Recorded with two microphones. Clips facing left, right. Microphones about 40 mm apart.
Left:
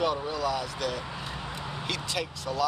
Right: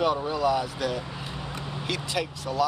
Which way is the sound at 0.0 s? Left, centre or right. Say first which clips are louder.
Right 4 dB; centre.